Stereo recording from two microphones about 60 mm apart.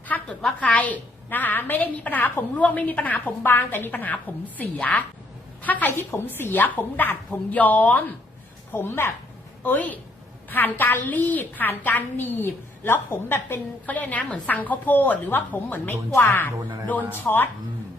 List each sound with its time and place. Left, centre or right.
0.1 s a sound: left
0.6 s a woman's voice: left
5.9 s a woman's voice: left
6.2 s a woman's voice: left
13.8 s a woman's voice: left
16.1 s a woman's voice: left
16.8 s a woman's voice: left